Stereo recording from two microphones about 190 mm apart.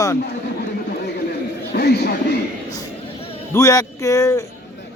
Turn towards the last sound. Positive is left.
turn(degrees=15)  # may be behind; listen again after turning